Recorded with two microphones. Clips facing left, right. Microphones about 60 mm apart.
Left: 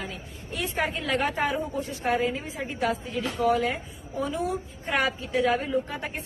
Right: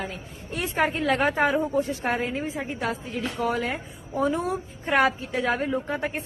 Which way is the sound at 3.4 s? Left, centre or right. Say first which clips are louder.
Left 3 dB; right.